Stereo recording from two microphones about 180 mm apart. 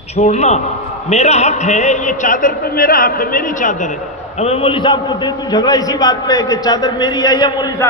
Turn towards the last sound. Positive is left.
turn(degrees=25)  # may be behind; listen again after turning